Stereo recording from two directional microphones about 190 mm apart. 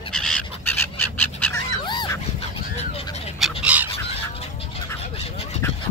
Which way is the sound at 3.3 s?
5° right (ahead or behind).